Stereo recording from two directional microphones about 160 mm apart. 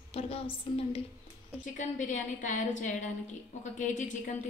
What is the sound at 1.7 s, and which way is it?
A woman's voice, 50° left (ahead or behind).